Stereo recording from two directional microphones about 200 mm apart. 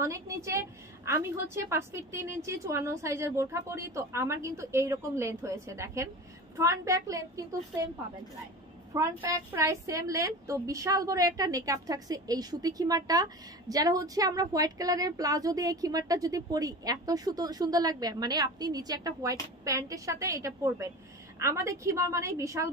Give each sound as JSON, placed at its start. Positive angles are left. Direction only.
{"t": 0.0, "sound": "a woman's voice", "side_deg": -15}
{"t": 8.9, "sound": "a woman's voice", "side_deg": -15}